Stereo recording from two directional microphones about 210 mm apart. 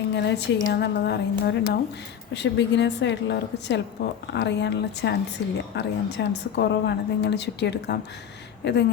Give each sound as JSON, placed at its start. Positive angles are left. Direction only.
{"t": 0.1, "sound": "a woman's voice", "side_deg": 55}